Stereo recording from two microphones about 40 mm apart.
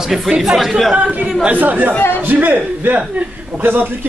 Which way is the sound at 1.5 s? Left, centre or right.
Right.